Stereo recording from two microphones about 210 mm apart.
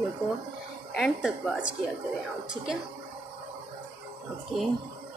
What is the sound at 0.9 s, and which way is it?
Speech, centre (ahead or behind).